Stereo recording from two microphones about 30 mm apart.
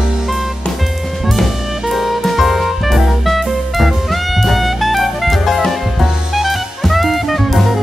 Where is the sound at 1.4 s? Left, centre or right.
Centre.